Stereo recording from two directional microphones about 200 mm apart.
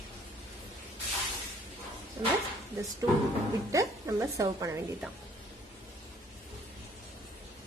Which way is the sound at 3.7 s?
15° right (ahead or behind).